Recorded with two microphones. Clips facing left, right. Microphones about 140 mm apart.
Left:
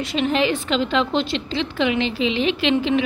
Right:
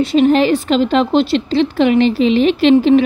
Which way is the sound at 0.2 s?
40° right (ahead or behind).